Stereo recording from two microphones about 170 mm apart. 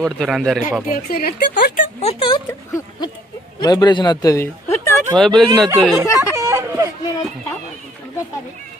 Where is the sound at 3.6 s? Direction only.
25° left (ahead or behind).